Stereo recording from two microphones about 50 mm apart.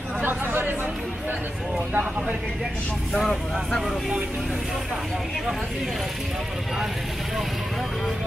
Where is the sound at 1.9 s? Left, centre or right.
Right.